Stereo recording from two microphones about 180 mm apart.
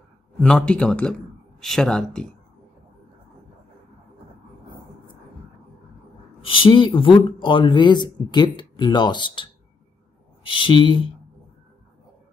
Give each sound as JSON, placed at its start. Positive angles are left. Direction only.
{"t": 0.4, "sound": "speech", "side_deg": 5}
{"t": 6.4, "sound": "speech", "side_deg": 30}